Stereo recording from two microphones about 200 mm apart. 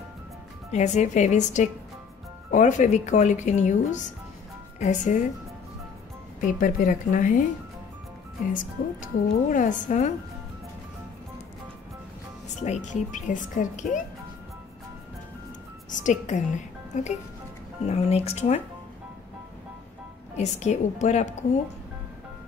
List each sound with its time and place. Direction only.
0.7 s speech: 35° left (ahead or behind)
6.4 s speech: 40° left (ahead or behind)
8.5 s speech: 40° left (ahead or behind)
12.6 s speech: 35° left (ahead or behind)
15.9 s speech: 40° left (ahead or behind)
20.3 s speech: 35° left (ahead or behind)